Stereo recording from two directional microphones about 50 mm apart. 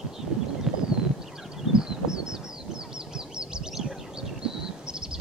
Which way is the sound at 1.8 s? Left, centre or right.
Centre.